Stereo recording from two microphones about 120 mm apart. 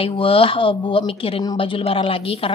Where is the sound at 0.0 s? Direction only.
50° left (ahead or behind).